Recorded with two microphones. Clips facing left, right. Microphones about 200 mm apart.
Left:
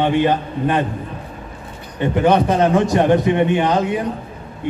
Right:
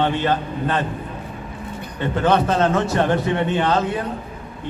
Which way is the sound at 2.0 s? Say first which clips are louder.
Left 3 dB; 15° left (ahead or behind).